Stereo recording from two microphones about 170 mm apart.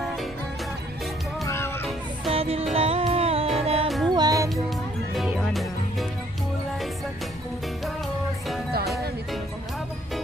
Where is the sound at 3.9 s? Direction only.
Centre (ahead or behind).